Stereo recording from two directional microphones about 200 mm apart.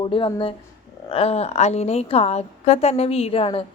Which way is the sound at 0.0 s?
25° left (ahead or behind).